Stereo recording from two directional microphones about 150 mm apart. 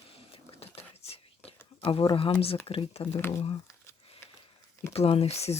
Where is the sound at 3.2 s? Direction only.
15° left (ahead or behind).